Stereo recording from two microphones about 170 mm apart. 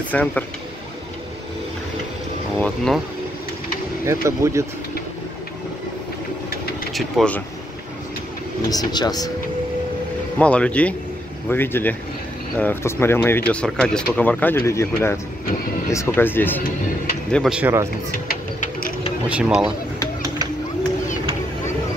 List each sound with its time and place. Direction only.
0.1 s speech: 10° left (ahead or behind)
2.6 s speech: 5° left (ahead or behind)
4.0 s speech: 15° right (ahead or behind)
6.9 s speech: centre (ahead or behind)
8.6 s speech: 25° left (ahead or behind)
10.4 s speech: 5° left (ahead or behind)
17.3 s speech: centre (ahead or behind)
18.3 s mechanisms: 60° left (ahead or behind)
19.2 s speech: 5° right (ahead or behind)